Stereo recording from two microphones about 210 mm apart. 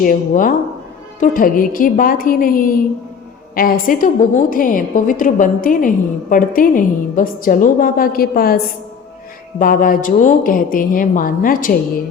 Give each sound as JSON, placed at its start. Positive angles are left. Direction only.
{"t": 0.0, "sound": "a woman's voice", "side_deg": 40}